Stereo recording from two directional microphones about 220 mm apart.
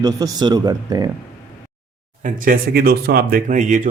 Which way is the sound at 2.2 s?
40° right (ahead or behind).